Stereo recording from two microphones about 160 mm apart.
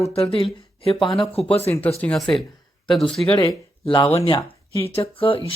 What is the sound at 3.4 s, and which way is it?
Speech, 25° left (ahead or behind).